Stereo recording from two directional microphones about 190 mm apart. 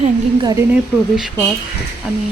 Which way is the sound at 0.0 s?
25° right (ahead or behind).